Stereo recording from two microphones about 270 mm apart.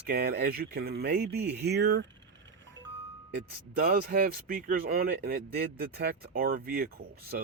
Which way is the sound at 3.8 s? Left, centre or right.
Right.